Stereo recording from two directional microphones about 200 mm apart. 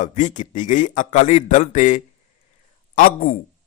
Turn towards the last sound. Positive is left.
turn(degrees=45)  # may be behind; listen again after turning